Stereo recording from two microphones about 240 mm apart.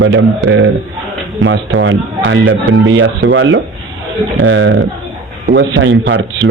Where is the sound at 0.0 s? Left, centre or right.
Right.